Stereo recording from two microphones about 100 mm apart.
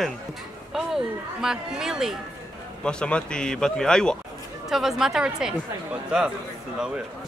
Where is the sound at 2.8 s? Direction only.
10° left (ahead or behind).